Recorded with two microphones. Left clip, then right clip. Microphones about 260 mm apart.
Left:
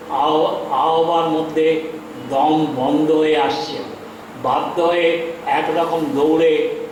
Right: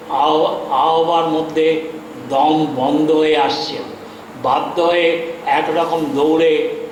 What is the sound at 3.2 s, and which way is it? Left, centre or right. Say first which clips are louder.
Speech: right 2 dB; centre.